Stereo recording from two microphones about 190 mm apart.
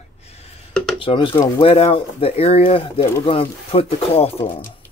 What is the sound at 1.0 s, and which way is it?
Speech, 25° left (ahead or behind).